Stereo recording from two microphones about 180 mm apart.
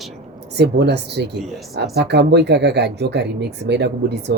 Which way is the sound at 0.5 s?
65° right (ahead or behind).